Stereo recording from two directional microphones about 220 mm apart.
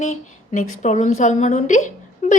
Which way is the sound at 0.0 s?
35° left (ahead or behind).